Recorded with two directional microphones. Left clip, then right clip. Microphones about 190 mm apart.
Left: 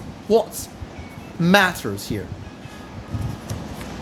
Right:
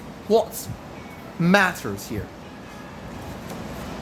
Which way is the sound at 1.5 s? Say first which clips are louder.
Left 3 dB; 15° left (ahead or behind).